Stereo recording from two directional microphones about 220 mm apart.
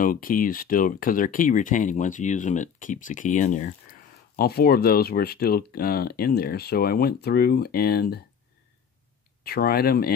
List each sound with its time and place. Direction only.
0.0 s speech: 40° left (ahead or behind)
4.4 s speech: 45° left (ahead or behind)
9.4 s speech: 45° left (ahead or behind)